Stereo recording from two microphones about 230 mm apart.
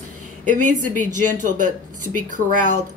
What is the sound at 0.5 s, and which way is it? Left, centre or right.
A woman's voice, right.